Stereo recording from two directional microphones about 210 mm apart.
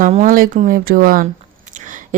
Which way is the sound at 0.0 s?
35° right (ahead or behind).